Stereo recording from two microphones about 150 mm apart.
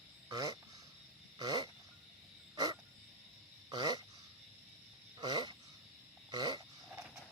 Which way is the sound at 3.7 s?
25° right (ahead or behind).